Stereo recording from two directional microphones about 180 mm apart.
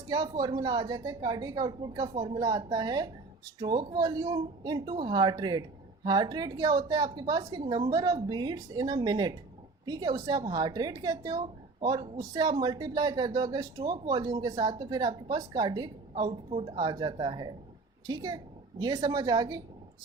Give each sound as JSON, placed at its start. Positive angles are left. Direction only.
{"t": 0.1, "sound": "speech", "side_deg": -20}